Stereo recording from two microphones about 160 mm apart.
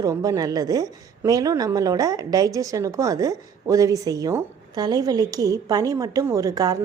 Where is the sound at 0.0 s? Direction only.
20° right (ahead or behind).